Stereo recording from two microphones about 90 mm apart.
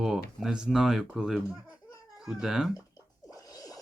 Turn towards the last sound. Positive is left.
turn(degrees=40)  # may be behind; listen again after turning